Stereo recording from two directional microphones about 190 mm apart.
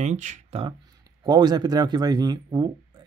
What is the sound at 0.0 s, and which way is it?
Speech, 40° right (ahead or behind).